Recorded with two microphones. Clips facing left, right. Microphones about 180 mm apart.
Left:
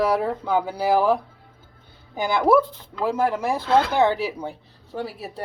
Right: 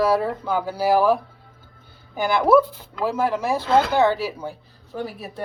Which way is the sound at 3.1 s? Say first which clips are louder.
Even; 15° left (ahead or behind).